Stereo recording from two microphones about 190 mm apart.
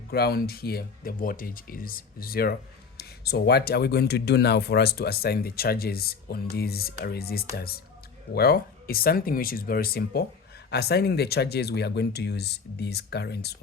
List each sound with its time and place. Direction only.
0.1 s speech: 55° left (ahead or behind)